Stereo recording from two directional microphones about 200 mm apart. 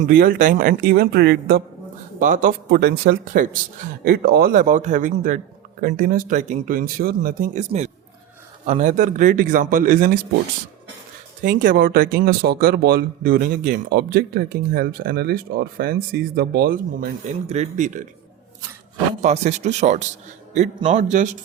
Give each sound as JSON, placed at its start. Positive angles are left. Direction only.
{"t": 0.0, "sound": "speech", "side_deg": -50}
{"t": 2.1, "sound": "a man's voice", "side_deg": -40}
{"t": 11.4, "sound": "speech", "side_deg": -45}
{"t": 19.2, "sound": "a man's voice", "side_deg": -35}